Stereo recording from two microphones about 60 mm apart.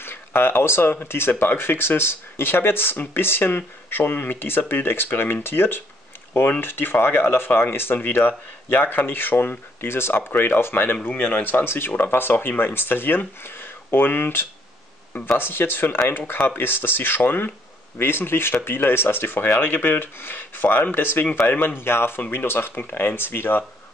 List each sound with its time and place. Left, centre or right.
0.0 s speech: left